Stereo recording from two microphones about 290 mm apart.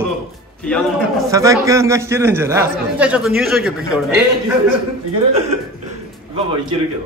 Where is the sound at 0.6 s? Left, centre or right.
Centre.